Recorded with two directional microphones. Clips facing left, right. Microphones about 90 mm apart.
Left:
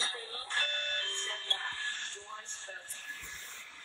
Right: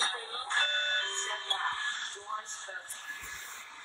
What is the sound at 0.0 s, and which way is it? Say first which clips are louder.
Fire alarm: right 5 dB; 35° right (ahead or behind).